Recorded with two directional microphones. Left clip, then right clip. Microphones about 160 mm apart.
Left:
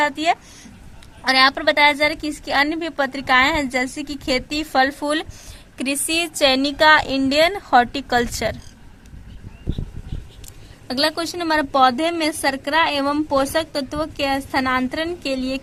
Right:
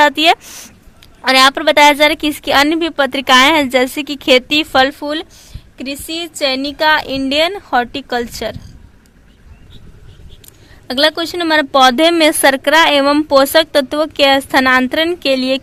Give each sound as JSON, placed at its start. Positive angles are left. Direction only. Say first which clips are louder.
{"t": 0.0, "sound": "a woman's voice", "louder": "right 9 dB", "side_deg": -25}
{"t": 10.8, "sound": "a woman's voice", "louder": "right 7 dB", "side_deg": -15}